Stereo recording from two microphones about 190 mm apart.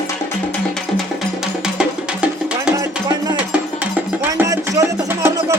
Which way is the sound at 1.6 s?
5° right (ahead or behind).